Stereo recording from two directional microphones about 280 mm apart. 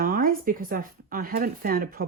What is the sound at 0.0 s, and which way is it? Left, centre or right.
Speech, right.